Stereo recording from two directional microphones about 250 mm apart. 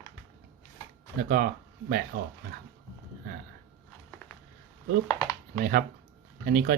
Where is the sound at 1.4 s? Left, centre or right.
Right.